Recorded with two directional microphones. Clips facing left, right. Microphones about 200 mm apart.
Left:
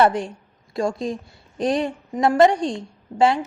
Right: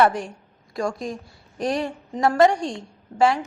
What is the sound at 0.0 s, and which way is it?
A woman's voice, 25° left (ahead or behind).